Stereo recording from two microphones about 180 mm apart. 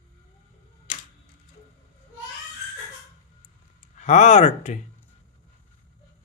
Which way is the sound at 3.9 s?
40° left (ahead or behind).